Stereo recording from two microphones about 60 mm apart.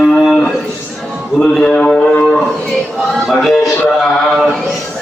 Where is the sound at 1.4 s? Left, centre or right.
Centre.